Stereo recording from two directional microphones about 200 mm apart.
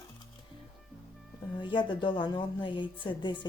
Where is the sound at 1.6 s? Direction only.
25° left (ahead or behind).